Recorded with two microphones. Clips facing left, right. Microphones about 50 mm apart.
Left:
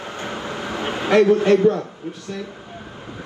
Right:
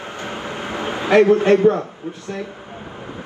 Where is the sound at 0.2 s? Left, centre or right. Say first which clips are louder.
Even; right.